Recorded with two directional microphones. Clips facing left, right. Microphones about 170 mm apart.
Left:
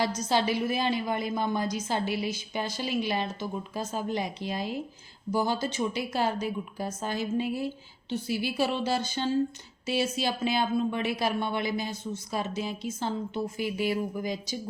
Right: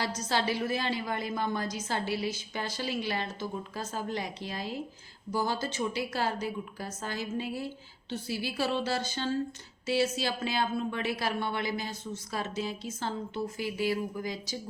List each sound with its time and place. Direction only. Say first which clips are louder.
0.3 s speech: left 1 dB; 15° left (ahead or behind)